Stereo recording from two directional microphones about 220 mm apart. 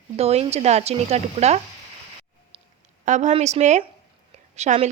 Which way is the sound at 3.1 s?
30° right (ahead or behind).